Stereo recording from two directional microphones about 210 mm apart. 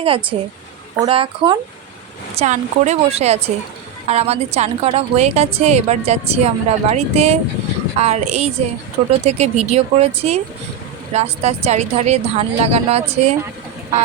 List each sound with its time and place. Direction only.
0.0 s a woman's voice: 25° right (ahead or behind)